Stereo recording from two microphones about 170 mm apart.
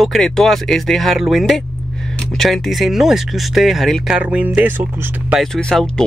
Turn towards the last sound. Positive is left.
turn(degrees=5)  # may be behind; listen again after turning